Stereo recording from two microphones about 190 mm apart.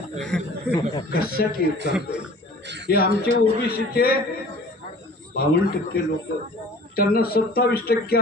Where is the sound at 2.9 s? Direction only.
55° left (ahead or behind).